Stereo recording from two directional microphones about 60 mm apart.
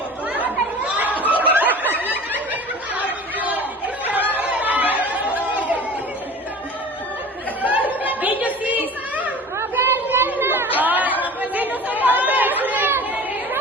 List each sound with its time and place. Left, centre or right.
0.9 s snicker: right
4.3 s chatter: right
7.6 s a sound: right
9.6 s chatter: right